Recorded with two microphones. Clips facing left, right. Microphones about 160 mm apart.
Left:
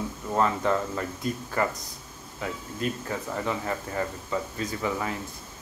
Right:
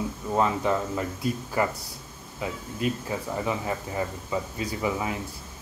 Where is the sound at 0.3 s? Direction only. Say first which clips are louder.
Even; 10° right (ahead or behind).